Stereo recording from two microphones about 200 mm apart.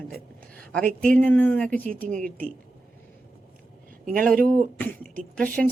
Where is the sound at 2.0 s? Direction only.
40° right (ahead or behind).